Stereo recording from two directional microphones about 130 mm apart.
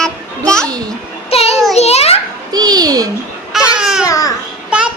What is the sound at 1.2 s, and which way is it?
Child singing, 50° left (ahead or behind).